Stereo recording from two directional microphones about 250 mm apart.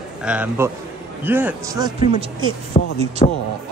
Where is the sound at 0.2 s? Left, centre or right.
Centre.